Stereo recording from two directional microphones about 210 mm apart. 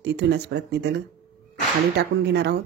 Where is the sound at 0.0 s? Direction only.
55° right (ahead or behind).